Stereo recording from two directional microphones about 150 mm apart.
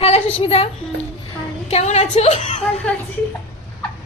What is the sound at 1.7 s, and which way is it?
Speech, 45° left (ahead or behind).